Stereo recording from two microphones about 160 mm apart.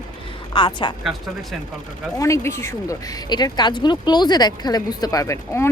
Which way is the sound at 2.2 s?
20° left (ahead or behind).